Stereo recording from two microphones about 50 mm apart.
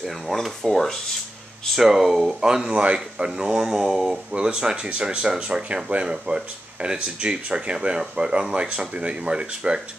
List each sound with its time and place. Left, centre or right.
0.0 s speech: centre
1.8 s speech: centre
2.7 s speech: right
3.3 s speech: centre